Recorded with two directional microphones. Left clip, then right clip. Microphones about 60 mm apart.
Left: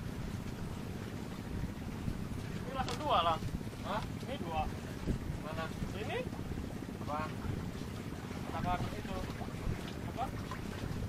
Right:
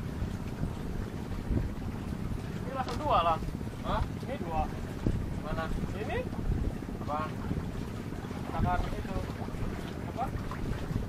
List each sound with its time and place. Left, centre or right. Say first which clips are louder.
2.8 s boat: right 4 dB; centre
3.8 s a sound: right 5 dB; centre
8.5 s boat: right 5 dB; centre